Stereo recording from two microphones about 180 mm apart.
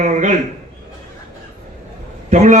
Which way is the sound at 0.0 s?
45° right (ahead or behind).